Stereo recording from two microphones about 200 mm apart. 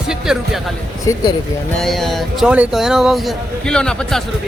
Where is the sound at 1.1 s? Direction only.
15° left (ahead or behind).